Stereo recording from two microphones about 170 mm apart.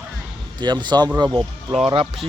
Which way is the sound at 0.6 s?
25° right (ahead or behind).